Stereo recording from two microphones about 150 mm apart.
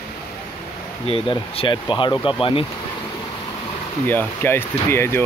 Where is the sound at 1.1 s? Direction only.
35° left (ahead or behind).